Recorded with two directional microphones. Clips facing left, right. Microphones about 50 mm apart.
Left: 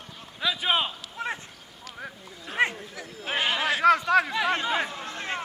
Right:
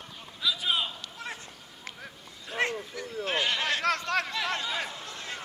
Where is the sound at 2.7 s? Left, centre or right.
Centre.